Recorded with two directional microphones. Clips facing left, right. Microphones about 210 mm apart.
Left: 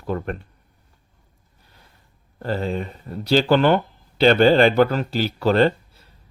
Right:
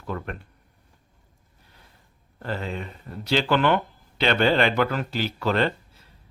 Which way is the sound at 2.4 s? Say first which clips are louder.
Left 6 dB; 35° left (ahead or behind).